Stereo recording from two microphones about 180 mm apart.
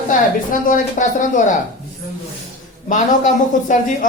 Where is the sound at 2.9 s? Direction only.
45° left (ahead or behind).